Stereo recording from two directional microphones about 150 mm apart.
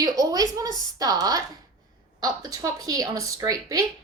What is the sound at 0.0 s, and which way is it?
Speech, 25° right (ahead or behind).